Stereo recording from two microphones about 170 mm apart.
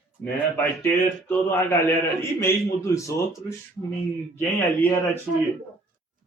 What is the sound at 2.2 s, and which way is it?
Speech, 15° left (ahead or behind).